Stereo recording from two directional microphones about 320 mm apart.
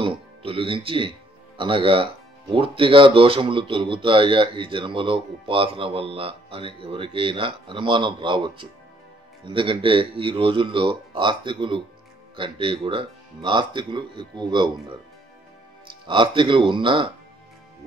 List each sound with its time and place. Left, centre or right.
0.0 s speech: centre
16.1 s speech: centre